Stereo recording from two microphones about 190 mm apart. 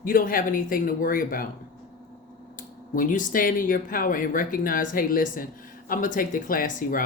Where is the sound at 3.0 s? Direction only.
45° left (ahead or behind).